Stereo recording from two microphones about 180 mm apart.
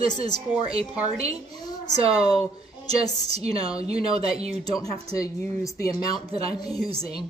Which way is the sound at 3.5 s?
20° left (ahead or behind).